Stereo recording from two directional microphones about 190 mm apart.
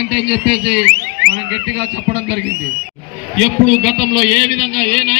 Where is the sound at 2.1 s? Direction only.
30° right (ahead or behind).